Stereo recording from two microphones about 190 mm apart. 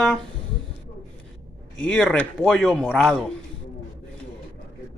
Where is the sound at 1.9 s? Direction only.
5° left (ahead or behind).